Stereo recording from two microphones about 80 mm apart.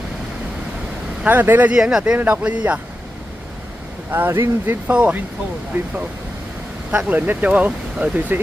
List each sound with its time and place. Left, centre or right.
1.2 s speech: right
1.7 s speech: centre
2.1 s speech: right
4.1 s speech: right
4.9 s speech: centre
6.9 s speech: centre